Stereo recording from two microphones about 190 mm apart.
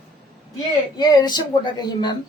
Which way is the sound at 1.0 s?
20° left (ahead or behind).